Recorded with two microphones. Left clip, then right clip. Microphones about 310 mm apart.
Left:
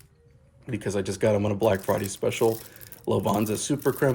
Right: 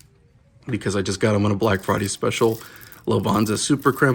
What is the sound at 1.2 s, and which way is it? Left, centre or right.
Speech, right.